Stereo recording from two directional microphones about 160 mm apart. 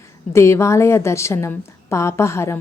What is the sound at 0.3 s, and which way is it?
Speech, 15° left (ahead or behind).